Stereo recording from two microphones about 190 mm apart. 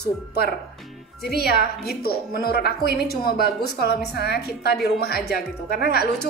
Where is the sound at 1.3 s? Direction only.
55° left (ahead or behind).